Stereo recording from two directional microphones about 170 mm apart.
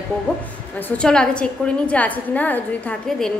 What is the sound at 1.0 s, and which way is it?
A woman's voice, 5° left (ahead or behind).